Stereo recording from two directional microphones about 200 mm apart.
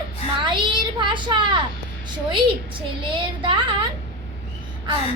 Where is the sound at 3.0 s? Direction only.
25° right (ahead or behind).